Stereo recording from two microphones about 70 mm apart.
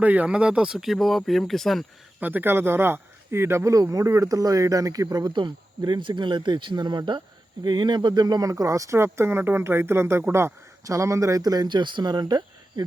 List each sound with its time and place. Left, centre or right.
0.0 s speech: right; by 1.8 s centre
2.2 s speech: right
5.8 s speech: right
9.1 s speech: right
10.8 s speech: right